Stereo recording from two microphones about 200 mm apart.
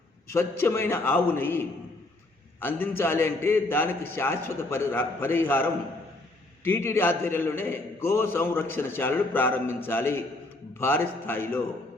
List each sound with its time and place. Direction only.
0.3 s a man's voice: 15° left (ahead or behind)